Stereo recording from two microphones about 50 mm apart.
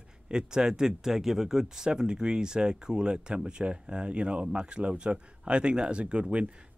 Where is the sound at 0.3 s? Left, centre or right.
Centre.